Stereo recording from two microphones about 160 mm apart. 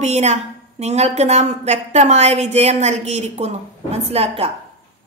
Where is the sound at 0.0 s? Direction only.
45° right (ahead or behind).